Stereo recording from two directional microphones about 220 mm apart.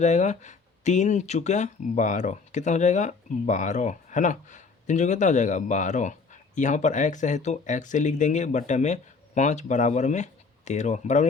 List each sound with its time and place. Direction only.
0.0 s speech: 30° left (ahead or behind)